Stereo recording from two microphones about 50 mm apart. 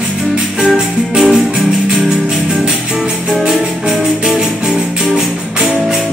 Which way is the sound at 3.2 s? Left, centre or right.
Centre.